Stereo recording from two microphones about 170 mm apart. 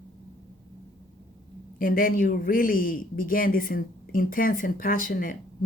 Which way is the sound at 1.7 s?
55° left (ahead or behind).